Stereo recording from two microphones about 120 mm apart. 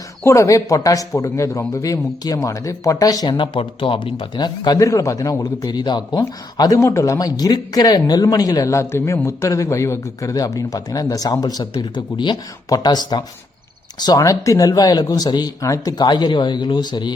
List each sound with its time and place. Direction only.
0.3 s speech: 25° left (ahead or behind)